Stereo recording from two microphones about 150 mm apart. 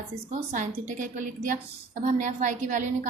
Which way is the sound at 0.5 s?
60° right (ahead or behind).